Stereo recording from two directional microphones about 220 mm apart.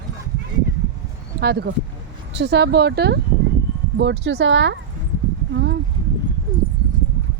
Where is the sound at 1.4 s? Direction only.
45° right (ahead or behind).